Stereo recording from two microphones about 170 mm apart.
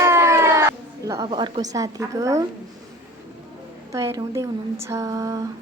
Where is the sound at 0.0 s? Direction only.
15° right (ahead or behind).